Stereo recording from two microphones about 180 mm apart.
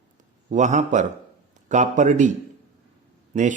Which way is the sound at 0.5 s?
40° right (ahead or behind).